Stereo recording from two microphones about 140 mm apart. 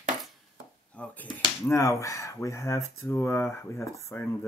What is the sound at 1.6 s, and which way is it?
Speech, 20° left (ahead or behind).